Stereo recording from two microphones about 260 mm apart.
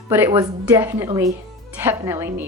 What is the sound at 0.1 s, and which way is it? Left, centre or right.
A woman's voice, centre.